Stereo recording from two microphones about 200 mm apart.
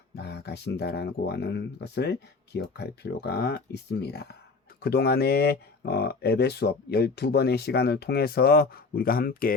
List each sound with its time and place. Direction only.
0.2 s speech: 55° left (ahead or behind)